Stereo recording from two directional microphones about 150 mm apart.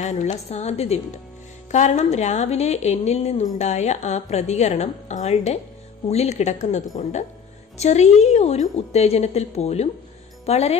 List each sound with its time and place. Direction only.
0.0 s a woman's voice: 50° left (ahead or behind)